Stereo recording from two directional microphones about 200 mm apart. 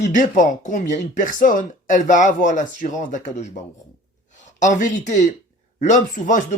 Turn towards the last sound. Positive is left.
turn(degrees=40)  # may be behind; listen again after turning